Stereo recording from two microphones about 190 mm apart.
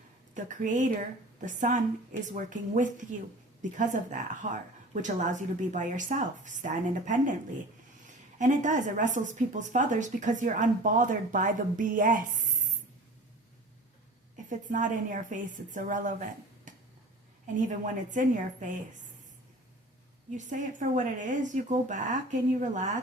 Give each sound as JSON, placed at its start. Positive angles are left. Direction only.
{"t": 0.3, "sound": "speech", "side_deg": -40}
{"t": 8.4, "sound": "speech", "side_deg": -40}
{"t": 14.5, "sound": "a woman's voice", "side_deg": -45}
{"t": 16.7, "sound": "tick-tock", "side_deg": -40}
{"t": 17.4, "sound": "a woman's voice", "side_deg": -40}
{"t": 20.3, "sound": "speech", "side_deg": -40}